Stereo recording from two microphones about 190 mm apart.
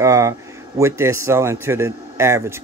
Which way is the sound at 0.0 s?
15° right (ahead or behind).